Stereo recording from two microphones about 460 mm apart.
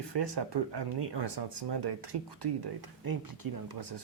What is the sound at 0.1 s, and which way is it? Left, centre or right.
Speech, right.